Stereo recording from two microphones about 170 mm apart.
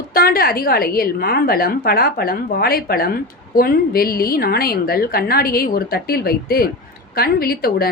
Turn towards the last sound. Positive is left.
turn(degrees=60)  # may be behind; listen again after turning